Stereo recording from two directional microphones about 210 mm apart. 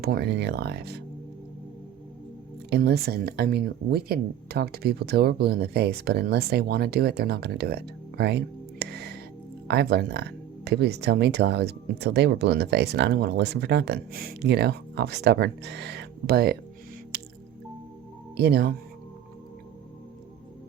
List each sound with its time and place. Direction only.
0.0 s speech: 50° right (ahead or behind)
2.6 s speech: 50° right (ahead or behind)
18.3 s speech: 50° right (ahead or behind)